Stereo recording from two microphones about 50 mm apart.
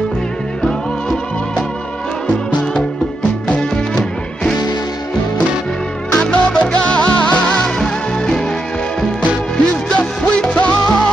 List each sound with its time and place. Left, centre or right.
3.4 s music: left
6.1 s music: centre
9.8 s music: left